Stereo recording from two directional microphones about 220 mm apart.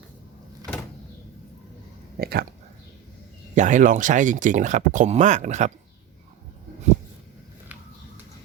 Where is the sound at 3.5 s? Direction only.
35° right (ahead or behind).